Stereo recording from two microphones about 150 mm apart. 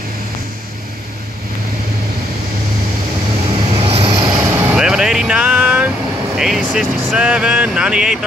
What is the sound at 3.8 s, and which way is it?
Vehicle, 40° right (ahead or behind).